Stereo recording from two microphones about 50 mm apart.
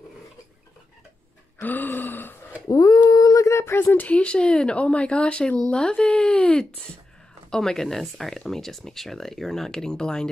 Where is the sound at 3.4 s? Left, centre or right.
Left.